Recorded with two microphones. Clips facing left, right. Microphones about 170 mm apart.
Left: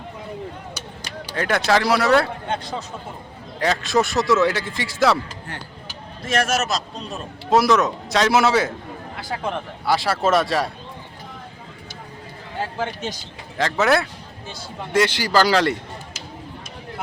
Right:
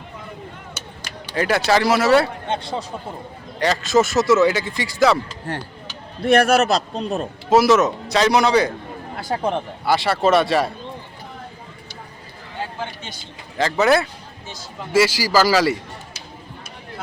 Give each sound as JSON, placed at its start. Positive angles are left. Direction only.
{"t": 1.4, "sound": "speech", "side_deg": -5}
{"t": 2.5, "sound": "a man's voice", "side_deg": -30}
{"t": 3.6, "sound": "speech", "side_deg": 0}
{"t": 5.5, "sound": "a sound", "side_deg": -60}
{"t": 6.6, "sound": "a man's voice", "side_deg": -35}
{"t": 7.5, "sound": "speech", "side_deg": 0}
{"t": 9.4, "sound": "a man's voice", "side_deg": -30}
{"t": 9.8, "sound": "speech", "side_deg": 0}
{"t": 12.8, "sound": "speech", "side_deg": 90}
{"t": 13.6, "sound": "speech", "side_deg": 0}